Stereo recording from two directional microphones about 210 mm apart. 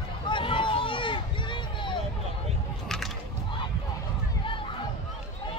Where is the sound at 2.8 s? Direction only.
Centre (ahead or behind).